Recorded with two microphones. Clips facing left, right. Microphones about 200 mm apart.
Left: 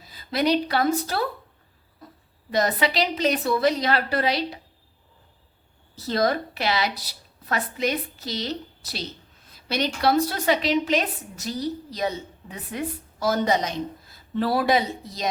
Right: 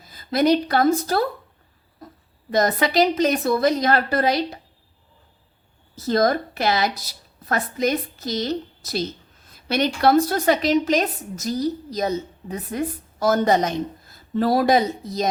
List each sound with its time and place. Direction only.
0.0 s a woman's voice: 45° right (ahead or behind)
2.5 s a woman's voice: 45° right (ahead or behind)
6.0 s a woman's voice: 45° right (ahead or behind)